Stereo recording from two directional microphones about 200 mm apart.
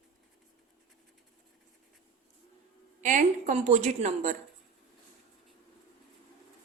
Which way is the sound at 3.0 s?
40° right (ahead or behind).